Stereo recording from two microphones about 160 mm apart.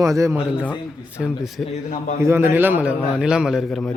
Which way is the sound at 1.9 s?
50° left (ahead or behind).